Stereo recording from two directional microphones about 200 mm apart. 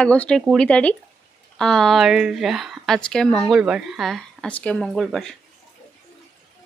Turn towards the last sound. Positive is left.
turn(degrees=0)  # may be behind; listen again after turning